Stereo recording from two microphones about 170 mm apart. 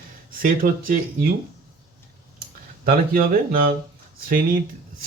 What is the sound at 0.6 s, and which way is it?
Speech, 50° right (ahead or behind).